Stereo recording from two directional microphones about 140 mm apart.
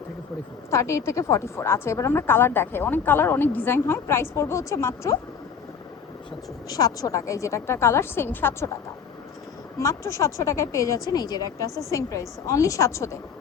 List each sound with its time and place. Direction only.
0.7 s a woman's voice: 20° left (ahead or behind)
6.7 s a woman's voice: 25° left (ahead or behind)
9.7 s a woman's voice: 20° left (ahead or behind)